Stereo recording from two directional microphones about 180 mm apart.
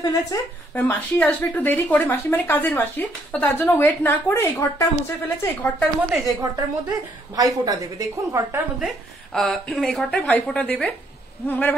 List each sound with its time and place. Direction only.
0.0 s speech: 20° left (ahead or behind); by 6.3 s centre (ahead or behind)
7.3 s a woman's voice: 20° right (ahead or behind)
8.7 s a woman's voice: centre (ahead or behind)